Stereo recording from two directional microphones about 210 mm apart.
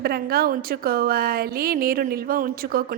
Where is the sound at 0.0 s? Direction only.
50° right (ahead or behind).